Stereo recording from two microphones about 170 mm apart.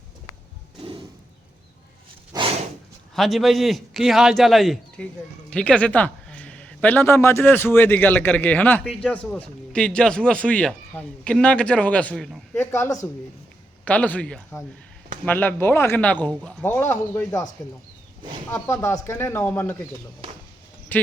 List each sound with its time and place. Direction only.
0.8 s a sound: 30° right (ahead or behind)
2.3 s a sound: 25° right (ahead or behind)
3.2 s a man's voice: centre (ahead or behind)
12.5 s a man's voice: 15° left (ahead or behind)
18.5 s a man's voice: 20° left (ahead or behind)
20.9 s speech: 10° left (ahead or behind)